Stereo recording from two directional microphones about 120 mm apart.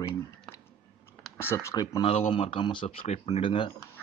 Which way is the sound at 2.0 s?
55° left (ahead or behind).